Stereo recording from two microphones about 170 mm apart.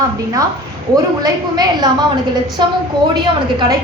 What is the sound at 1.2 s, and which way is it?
Speech, 25° right (ahead or behind).